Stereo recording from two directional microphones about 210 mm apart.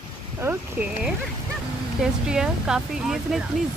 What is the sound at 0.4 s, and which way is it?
Speech, 10° right (ahead or behind).